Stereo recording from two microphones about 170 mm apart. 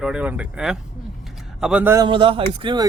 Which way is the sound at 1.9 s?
30° right (ahead or behind).